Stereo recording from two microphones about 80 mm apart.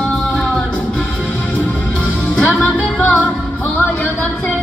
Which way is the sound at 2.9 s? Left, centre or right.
Centre.